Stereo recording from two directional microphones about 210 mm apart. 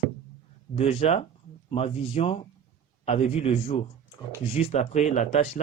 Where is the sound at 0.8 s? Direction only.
30° left (ahead or behind).